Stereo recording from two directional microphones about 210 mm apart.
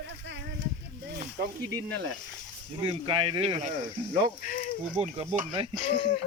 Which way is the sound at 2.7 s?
25° right (ahead or behind).